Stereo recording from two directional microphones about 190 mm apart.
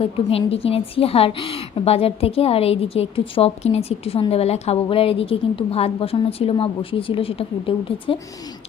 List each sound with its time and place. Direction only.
0.0 s a woman's voice: 30° left (ahead or behind)